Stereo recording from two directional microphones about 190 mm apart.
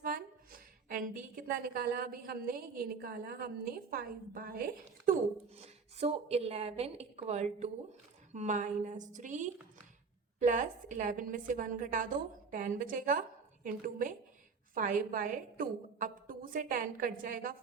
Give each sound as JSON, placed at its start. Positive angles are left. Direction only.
{"t": 0.0, "sound": "a woman's voice", "side_deg": -45}
{"t": 5.5, "sound": "a woman's voice", "side_deg": -35}